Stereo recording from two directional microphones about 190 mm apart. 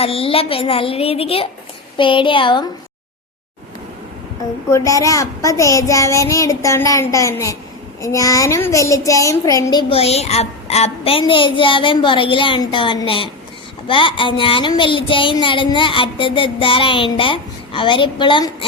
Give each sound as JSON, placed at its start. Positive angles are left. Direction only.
{"t": 0.0, "sound": "speech", "side_deg": 30}
{"t": 4.7, "sound": "a child's voice", "side_deg": 15}